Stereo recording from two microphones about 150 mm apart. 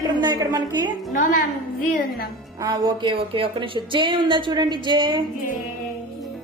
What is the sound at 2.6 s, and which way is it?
A woman's voice, 30° right (ahead or behind).